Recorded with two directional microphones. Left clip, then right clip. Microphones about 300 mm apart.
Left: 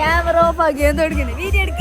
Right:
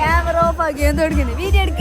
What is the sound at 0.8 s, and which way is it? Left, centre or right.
Speech, centre.